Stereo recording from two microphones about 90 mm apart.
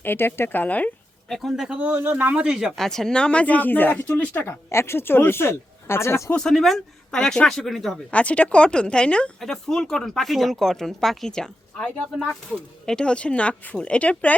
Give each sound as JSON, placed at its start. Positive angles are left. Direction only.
{"t": 0.0, "sound": "speech", "side_deg": 25}
{"t": 1.3, "sound": "speech", "side_deg": 0}
{"t": 1.8, "sound": "speech", "side_deg": -20}
{"t": 6.3, "sound": "speech", "side_deg": 5}
{"t": 8.1, "sound": "speech", "side_deg": 15}